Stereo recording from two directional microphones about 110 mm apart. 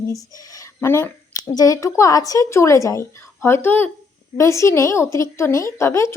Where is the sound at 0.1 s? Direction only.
35° left (ahead or behind).